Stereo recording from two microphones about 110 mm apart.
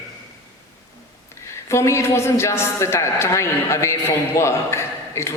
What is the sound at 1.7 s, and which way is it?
A man's voice, 25° left (ahead or behind).